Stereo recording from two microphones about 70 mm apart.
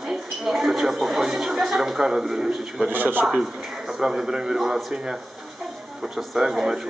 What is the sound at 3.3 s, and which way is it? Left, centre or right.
A man's voice, centre.